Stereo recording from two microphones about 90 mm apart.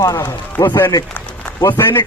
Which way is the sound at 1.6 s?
30° left (ahead or behind).